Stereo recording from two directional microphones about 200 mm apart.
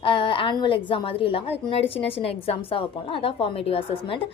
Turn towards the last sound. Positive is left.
turn(degrees=30)  # may be behind; listen again after turning